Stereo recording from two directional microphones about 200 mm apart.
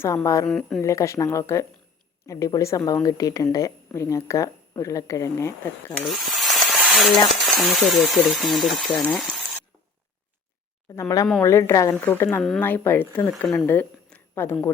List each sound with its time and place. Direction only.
0.0 s a woman's voice: 15° left (ahead or behind)
0.4 s speech: 5° left (ahead or behind)
0.8 s a woman's voice: 15° left (ahead or behind)
6.1 s a sound: centre (ahead or behind)
7.3 s speech: centre (ahead or behind)
10.9 s a woman's voice: 10° left (ahead or behind)